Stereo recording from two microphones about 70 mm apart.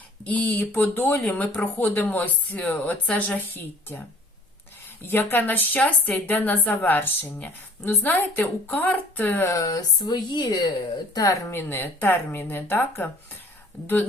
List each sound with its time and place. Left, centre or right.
0.3 s a woman's voice: left
5.0 s a woman's voice: left
9.5 s speech: left
11.1 s speech: left
11.5 s speech: left